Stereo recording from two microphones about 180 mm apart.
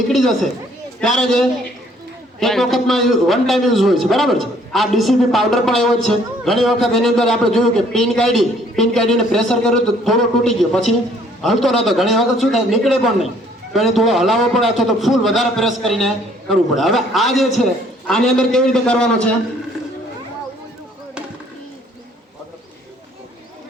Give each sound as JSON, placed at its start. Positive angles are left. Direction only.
{"t": 0.1, "sound": "a man's voice", "side_deg": 0}